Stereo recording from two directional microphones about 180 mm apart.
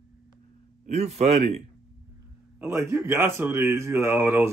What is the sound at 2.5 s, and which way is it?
Speech, 15° right (ahead or behind).